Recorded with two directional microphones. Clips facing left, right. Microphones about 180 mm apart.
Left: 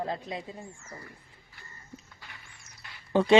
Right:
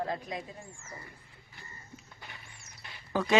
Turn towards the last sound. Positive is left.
turn(degrees=30)  # may be behind; listen again after turning